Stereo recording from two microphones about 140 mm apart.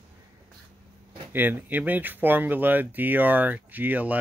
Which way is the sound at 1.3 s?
15° right (ahead or behind).